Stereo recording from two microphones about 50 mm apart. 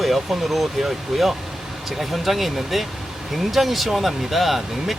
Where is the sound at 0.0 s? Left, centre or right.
Centre.